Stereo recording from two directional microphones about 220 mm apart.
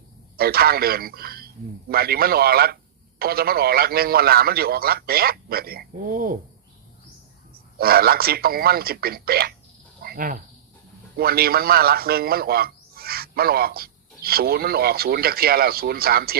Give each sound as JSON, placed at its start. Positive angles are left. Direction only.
{"t": 0.3, "sound": "speech", "side_deg": -45}
{"t": 7.5, "sound": "speech", "side_deg": -45}